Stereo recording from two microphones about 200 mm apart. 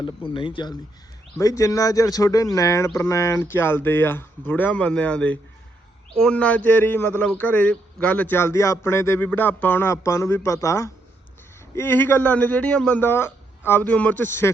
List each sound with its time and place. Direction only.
0.0 s a man's voice: 25° left (ahead or behind)